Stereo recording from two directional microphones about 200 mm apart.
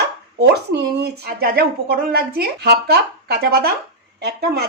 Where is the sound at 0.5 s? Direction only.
55° right (ahead or behind).